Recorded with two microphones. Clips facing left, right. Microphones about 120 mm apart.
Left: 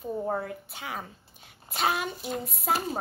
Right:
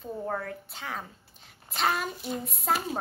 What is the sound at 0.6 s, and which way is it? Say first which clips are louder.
A child's voice: even; 5° left (ahead or behind).